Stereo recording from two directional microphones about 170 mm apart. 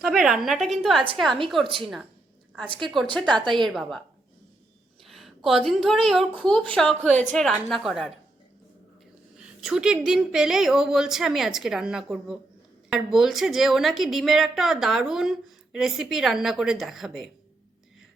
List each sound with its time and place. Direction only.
0.0 s a woman's voice: 5° right (ahead or behind)
5.0 s a woman's voice: centre (ahead or behind)
9.6 s a woman's voice: 5° right (ahead or behind)